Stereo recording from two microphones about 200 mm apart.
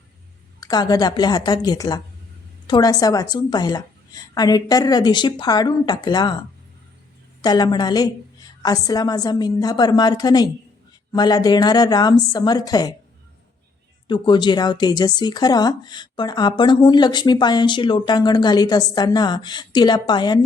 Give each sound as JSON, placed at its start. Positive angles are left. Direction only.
{"t": 0.6, "sound": "speech", "side_deg": 20}
{"t": 7.4, "sound": "speech", "side_deg": 20}
{"t": 14.1, "sound": "speech", "side_deg": 20}